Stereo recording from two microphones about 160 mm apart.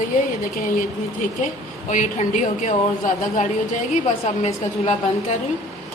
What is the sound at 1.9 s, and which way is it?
A woman's voice, 50° left (ahead or behind).